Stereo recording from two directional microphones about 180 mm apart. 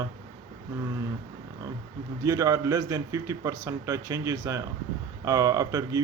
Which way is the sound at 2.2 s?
15° right (ahead or behind).